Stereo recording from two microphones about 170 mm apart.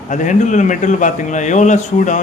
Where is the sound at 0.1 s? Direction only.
45° left (ahead or behind).